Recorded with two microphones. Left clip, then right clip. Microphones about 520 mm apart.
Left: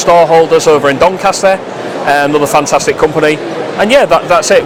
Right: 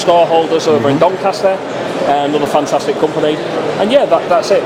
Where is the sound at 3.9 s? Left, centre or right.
Left.